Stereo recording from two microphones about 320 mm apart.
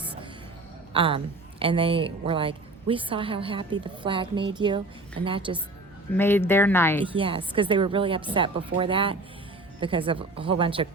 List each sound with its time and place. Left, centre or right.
0.9 s a woman's voice: centre
6.1 s speech: centre
7.0 s a woman's voice: centre